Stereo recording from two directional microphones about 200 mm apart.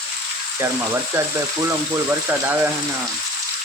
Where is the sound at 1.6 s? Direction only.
10° right (ahead or behind).